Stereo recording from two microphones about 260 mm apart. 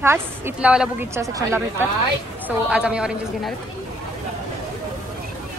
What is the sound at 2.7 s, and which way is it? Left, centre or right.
Speech, centre.